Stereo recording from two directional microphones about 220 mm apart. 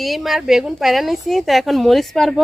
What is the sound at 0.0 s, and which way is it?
Speech, centre (ahead or behind).